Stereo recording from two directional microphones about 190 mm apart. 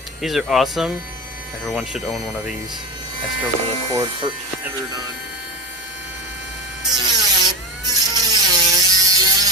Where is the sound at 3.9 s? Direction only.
20° right (ahead or behind).